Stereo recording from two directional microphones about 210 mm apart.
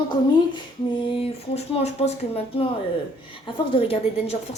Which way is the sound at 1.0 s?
30° left (ahead or behind).